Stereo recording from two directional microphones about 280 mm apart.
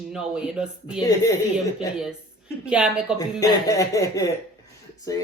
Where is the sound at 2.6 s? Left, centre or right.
Centre.